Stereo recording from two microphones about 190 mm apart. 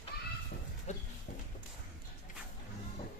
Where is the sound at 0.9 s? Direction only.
35° left (ahead or behind).